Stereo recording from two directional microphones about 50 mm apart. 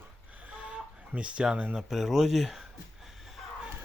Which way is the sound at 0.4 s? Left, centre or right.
Right.